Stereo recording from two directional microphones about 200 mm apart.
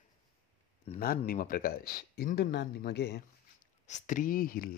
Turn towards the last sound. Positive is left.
turn(degrees=45)  # may be behind; listen again after turning